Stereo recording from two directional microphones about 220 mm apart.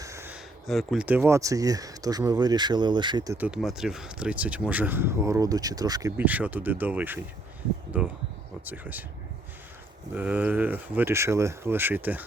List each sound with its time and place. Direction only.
0.0 s a sound: 10° right (ahead or behind)
0.7 s speech: centre (ahead or behind); by 3.3 s 20° right (ahead or behind)
3.3 s speech: 5° right (ahead or behind)
10.2 s speech: 5° right (ahead or behind)